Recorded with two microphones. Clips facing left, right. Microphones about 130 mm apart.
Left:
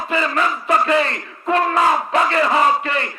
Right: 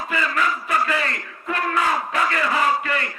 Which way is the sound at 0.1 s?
25° left (ahead or behind).